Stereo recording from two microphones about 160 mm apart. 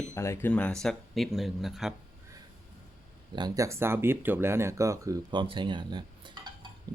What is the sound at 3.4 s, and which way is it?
Speech, 20° right (ahead or behind).